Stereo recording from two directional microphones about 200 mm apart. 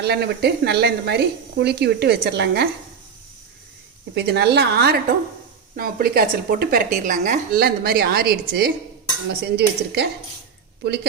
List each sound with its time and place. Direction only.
0.0 s speech: 55° right (ahead or behind)
4.1 s speech: 55° right (ahead or behind)